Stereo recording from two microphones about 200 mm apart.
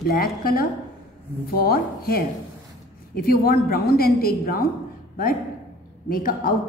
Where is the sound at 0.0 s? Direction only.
50° left (ahead or behind).